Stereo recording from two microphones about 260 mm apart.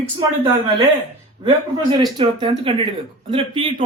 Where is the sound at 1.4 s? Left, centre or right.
Centre.